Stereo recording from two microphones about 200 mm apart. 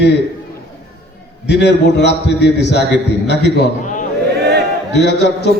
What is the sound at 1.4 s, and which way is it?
A man's voice, 60° left (ahead or behind).